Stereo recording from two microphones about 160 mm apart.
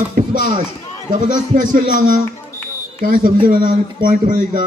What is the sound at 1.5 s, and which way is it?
A man's voice, 55° right (ahead or behind).